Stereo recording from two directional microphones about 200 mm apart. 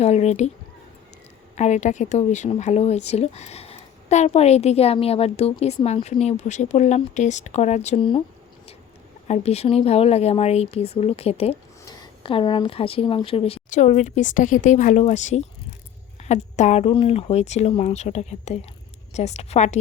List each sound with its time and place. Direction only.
0.0 s speech: 35° left (ahead or behind)
1.5 s speech: 35° left (ahead or behind)
9.2 s speech: 35° left (ahead or behind)